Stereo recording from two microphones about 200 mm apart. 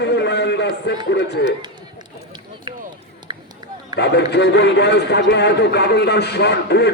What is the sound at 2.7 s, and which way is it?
Run, 20° right (ahead or behind).